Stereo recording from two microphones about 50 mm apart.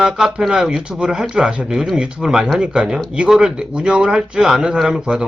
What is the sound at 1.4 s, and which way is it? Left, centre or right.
Speech, right.